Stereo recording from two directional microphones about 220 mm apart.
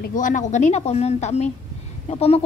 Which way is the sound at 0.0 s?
35° left (ahead or behind).